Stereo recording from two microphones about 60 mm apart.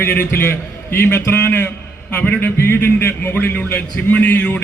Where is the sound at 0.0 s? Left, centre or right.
Left.